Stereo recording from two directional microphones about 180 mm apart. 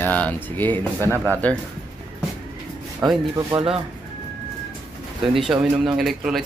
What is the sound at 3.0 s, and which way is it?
Speech, 10° right (ahead or behind).